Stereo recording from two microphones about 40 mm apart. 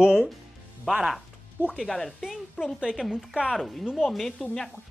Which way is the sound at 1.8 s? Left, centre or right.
Centre.